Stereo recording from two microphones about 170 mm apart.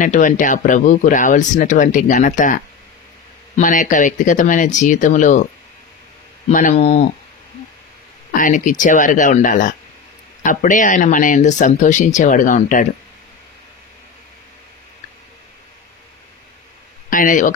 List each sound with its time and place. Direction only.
0.0 s speech: 50° left (ahead or behind)
6.5 s speech: 50° left (ahead or behind)
6.8 s speech: 40° left (ahead or behind)
8.3 s speech: 50° left (ahead or behind)
17.1 s speech: 55° left (ahead or behind)